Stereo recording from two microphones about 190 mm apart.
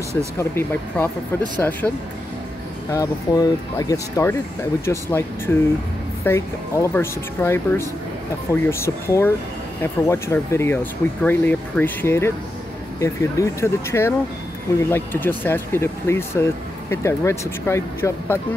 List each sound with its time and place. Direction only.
0.4 s speech: 10° left (ahead or behind)
2.9 s speech: 20° left (ahead or behind)